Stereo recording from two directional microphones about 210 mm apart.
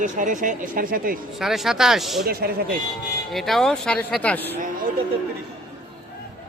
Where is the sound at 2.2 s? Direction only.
45° right (ahead or behind).